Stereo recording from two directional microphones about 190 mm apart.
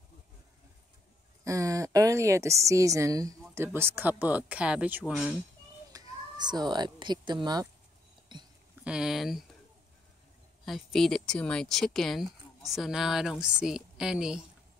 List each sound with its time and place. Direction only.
1.4 s a woman's voice: 15° right (ahead or behind)
5.9 s speech: 20° right (ahead or behind)
8.3 s a sound: 25° right (ahead or behind)
8.8 s speech: 5° right (ahead or behind)
10.6 s speech: centre (ahead or behind)